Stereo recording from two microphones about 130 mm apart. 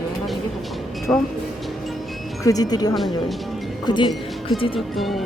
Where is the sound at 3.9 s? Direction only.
35° left (ahead or behind).